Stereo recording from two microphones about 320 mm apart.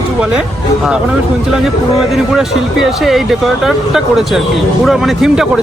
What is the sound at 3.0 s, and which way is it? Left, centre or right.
Speech, centre.